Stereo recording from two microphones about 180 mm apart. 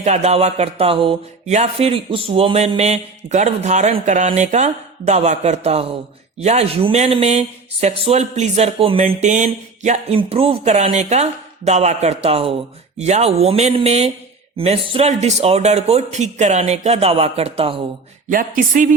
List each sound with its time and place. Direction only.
0.0 s speech: 40° right (ahead or behind)
18.3 s speech: 50° right (ahead or behind)